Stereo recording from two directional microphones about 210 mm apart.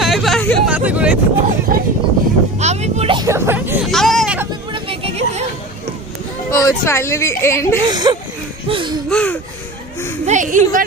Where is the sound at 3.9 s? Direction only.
Centre (ahead or behind).